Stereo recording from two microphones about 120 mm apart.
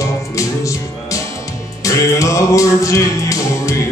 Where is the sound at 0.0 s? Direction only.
25° left (ahead or behind).